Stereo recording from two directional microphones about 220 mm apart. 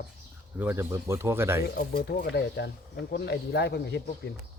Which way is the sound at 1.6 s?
45° left (ahead or behind).